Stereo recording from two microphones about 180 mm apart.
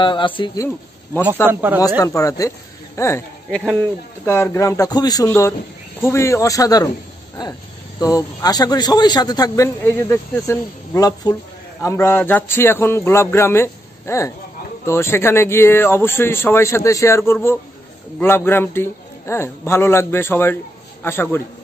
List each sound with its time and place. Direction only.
0.0 s speech: 30° left (ahead or behind)
1.5 s speech: 10° right (ahead or behind)
2.0 s speech: 20° left (ahead or behind)
8.0 s speech: 20° left (ahead or behind)